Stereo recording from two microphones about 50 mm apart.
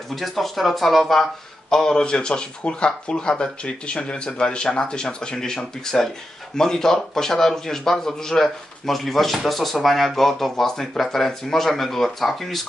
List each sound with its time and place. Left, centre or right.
0.1 s speech: centre